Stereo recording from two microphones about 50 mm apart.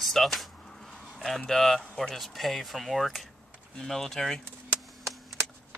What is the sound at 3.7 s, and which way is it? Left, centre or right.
Speech, centre.